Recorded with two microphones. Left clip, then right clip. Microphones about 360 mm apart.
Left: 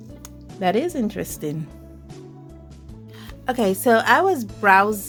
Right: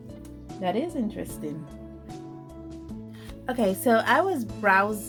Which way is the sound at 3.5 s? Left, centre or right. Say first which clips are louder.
Left 5 dB; centre.